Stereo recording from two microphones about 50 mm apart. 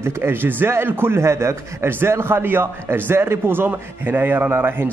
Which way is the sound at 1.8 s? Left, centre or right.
Right.